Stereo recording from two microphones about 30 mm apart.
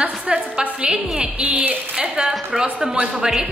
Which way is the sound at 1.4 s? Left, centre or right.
Right.